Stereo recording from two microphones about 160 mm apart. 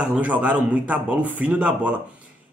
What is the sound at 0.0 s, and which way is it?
A man's voice, 10° right (ahead or behind).